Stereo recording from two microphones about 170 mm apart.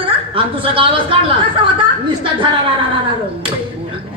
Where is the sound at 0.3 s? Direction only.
30° right (ahead or behind).